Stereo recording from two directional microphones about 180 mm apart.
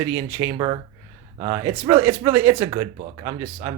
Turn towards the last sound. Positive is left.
turn(degrees=-20)  # may be behind; listen again after turning